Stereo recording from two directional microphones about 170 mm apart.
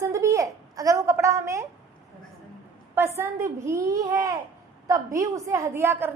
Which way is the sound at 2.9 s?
15° right (ahead or behind).